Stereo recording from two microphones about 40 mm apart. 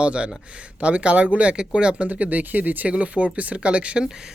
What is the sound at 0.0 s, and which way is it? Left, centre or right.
Speech, right.